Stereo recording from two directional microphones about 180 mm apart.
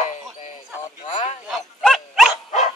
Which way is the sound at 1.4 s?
Centre (ahead or behind).